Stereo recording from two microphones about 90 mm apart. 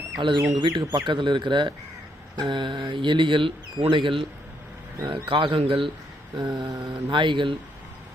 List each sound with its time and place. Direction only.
0.2 s speech: 60° right (ahead or behind); by 5.9 s 80° right
6.3 s mantra: 50° right (ahead or behind)
7.1 s speech: 65° right (ahead or behind)